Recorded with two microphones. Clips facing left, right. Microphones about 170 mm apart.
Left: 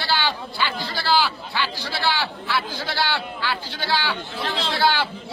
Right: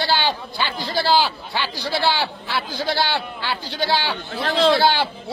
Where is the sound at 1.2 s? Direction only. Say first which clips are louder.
Right 1 dB; 35° right (ahead or behind).